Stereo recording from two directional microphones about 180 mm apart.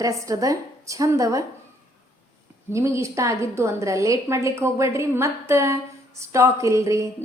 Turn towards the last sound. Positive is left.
turn(degrees=-15)  # may be behind; listen again after turning